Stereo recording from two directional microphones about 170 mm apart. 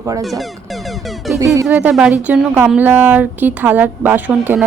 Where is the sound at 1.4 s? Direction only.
20° right (ahead or behind).